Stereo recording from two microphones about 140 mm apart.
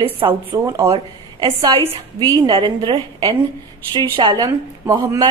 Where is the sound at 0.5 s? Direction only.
25° right (ahead or behind).